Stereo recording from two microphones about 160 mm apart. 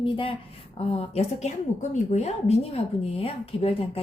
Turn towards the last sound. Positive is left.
turn(degrees=35)  # may be behind; listen again after turning